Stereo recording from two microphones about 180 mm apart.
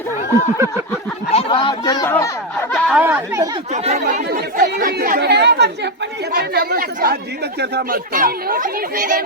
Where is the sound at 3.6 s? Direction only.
40° right (ahead or behind).